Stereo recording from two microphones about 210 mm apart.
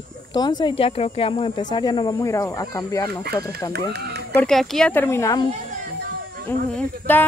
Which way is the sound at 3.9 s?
50° right (ahead or behind).